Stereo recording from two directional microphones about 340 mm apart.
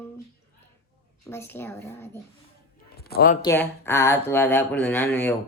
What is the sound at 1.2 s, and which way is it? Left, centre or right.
Speech, centre.